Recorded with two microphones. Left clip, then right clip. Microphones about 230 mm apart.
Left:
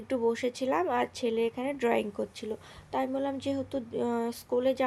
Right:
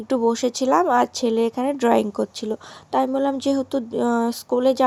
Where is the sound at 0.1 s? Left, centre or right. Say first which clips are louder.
Right 8 dB; right.